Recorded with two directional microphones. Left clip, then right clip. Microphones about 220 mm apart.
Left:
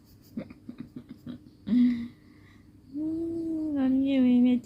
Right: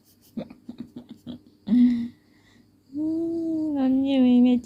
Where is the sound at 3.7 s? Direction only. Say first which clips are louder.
Right 2 dB; 15° right (ahead or behind).